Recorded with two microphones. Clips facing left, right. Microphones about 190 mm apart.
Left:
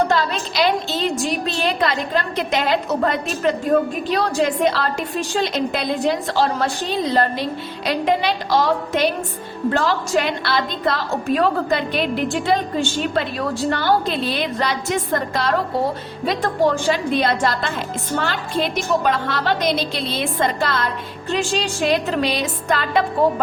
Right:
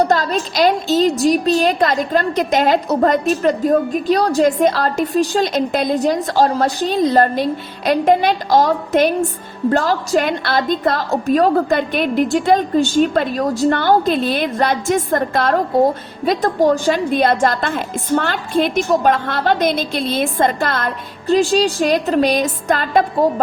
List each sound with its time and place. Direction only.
0.1 s a woman's voice: 40° right (ahead or behind)
21.2 s a woman's voice: 35° right (ahead or behind)